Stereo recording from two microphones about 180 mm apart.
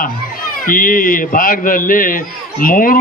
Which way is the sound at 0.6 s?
50° left (ahead or behind).